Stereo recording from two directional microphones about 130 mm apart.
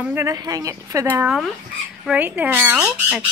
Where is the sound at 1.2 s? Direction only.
Centre (ahead or behind).